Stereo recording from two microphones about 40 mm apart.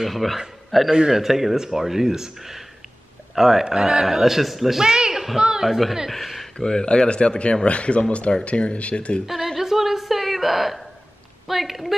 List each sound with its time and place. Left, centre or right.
0.0 s speech: centre
0.8 s a man's voice: centre
6.6 s speech: left
9.2 s a woman's voice: centre
9.6 s a sound: centre
11.4 s speech: centre